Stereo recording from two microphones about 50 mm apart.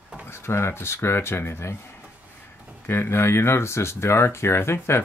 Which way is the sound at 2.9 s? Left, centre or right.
Left.